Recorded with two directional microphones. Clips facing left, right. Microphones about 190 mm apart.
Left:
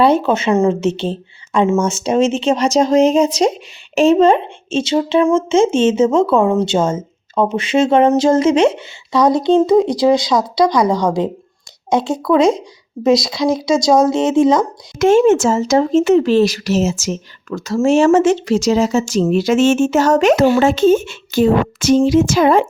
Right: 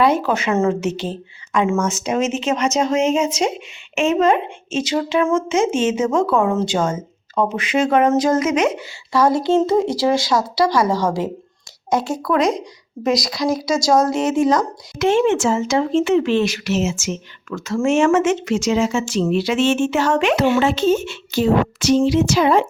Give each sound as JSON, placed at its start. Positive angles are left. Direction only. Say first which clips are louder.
{"t": 0.0, "sound": "a woman's voice", "louder": "left 4 dB", "side_deg": 25}
{"t": 13.6, "sound": "speech", "louder": "left 4 dB", "side_deg": 20}
{"t": 14.9, "sound": "speech", "louder": "left 5 dB", "side_deg": 45}